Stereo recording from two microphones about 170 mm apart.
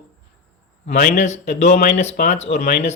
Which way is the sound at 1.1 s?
40° left (ahead or behind).